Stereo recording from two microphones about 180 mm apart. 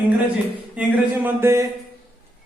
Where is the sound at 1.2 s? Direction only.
15° right (ahead or behind).